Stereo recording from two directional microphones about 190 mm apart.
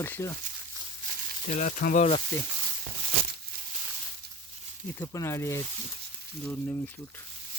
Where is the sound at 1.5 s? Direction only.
40° left (ahead or behind).